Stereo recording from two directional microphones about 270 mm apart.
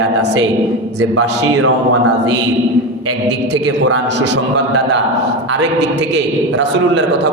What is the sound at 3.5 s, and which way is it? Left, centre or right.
A man's voice, right.